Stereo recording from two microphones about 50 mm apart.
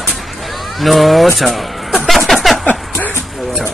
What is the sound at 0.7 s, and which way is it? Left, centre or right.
Speech, centre.